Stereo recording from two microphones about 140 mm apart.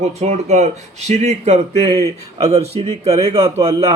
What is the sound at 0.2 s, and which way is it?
A man's voice, 55° right (ahead or behind).